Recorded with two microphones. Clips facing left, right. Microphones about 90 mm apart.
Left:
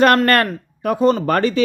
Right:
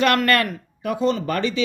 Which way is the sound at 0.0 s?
40° left (ahead or behind).